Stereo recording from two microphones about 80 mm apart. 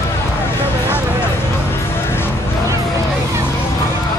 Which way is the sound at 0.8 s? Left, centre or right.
Left.